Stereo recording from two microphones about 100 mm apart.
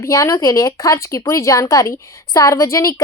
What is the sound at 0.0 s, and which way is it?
Speech, 30° left (ahead or behind).